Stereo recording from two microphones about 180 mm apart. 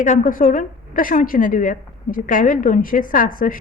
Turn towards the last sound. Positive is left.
turn(degrees=50)  # may be behind; listen again after turning